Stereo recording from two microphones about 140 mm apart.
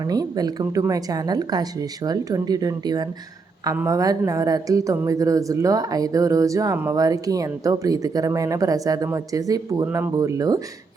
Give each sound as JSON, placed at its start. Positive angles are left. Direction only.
{"t": 0.1, "sound": "speech", "side_deg": -30}